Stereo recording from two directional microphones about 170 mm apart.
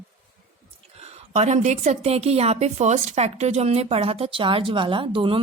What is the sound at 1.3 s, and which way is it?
Speech, 40° right (ahead or behind).